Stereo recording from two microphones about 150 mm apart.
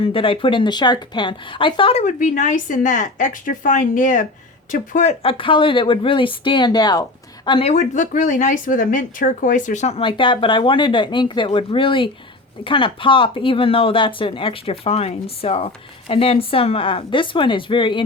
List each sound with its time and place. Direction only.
0.0 s speech: 35° left (ahead or behind); by 5.1 s 55° left (ahead or behind)
5.2 s speech: 35° left (ahead or behind)
7.7 s speech: 55° left (ahead or behind)
10.0 s speech: 35° left (ahead or behind)